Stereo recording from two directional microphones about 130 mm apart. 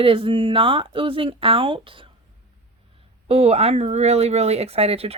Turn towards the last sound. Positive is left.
turn(degrees=-50)  # may be behind; listen again after turning